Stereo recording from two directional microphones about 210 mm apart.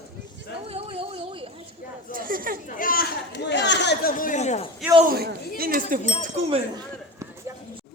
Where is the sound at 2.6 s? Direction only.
40° left (ahead or behind).